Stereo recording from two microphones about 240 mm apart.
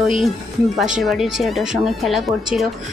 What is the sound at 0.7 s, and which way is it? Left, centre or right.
Speech, centre.